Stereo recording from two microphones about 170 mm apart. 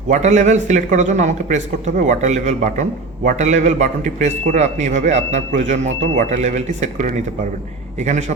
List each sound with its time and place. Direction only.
0.1 s a man's voice: 45° right (ahead or behind)